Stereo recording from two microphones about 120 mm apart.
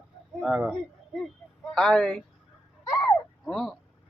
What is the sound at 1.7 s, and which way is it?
Speech, 5° left (ahead or behind).